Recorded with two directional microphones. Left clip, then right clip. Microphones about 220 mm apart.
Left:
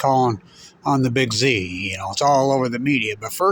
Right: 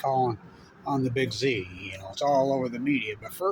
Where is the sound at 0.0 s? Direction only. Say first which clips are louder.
Left 8 dB; 55° left (ahead or behind).